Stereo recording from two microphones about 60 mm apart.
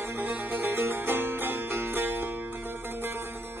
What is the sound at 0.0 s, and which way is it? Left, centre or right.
Music, right.